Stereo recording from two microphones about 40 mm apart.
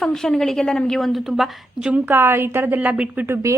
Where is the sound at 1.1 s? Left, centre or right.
Centre.